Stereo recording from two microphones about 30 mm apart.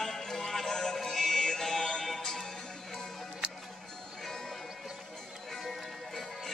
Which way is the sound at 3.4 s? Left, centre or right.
Right.